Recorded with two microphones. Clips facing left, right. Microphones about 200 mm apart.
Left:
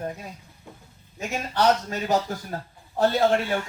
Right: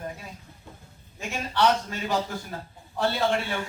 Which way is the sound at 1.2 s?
40° left (ahead or behind).